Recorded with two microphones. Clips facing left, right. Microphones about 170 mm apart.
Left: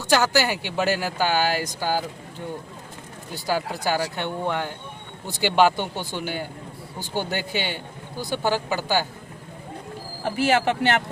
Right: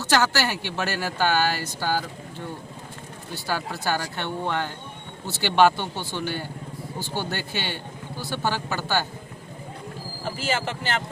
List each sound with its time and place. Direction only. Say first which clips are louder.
0.0 s speech: left 2 dB; 10° left (ahead or behind)
3.3 s speech: left 4 dB; 15° left (ahead or behind)
10.2 s speech: left 7 dB; 65° left (ahead or behind)